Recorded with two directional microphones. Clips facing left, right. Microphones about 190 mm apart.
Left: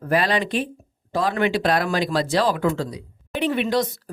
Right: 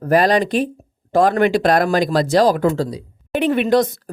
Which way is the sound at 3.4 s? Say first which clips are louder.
Right 6 dB; 50° right (ahead or behind).